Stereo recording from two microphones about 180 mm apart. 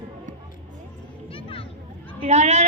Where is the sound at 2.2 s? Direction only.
40° right (ahead or behind).